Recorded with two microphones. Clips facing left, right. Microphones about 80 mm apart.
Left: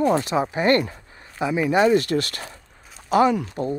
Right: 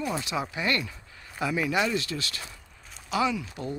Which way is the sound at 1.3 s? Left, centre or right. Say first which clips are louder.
Left 7 dB; left.